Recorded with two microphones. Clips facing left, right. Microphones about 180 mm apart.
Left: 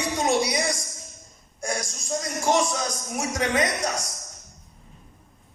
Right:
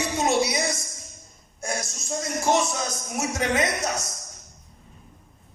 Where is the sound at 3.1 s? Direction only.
25° right (ahead or behind).